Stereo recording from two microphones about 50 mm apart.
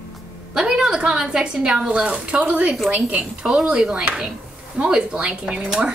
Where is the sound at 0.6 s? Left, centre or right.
Centre.